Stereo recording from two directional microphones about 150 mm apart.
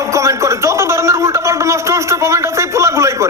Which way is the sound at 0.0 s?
20° right (ahead or behind).